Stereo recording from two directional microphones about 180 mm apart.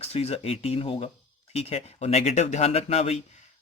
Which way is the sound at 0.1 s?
35° left (ahead or behind).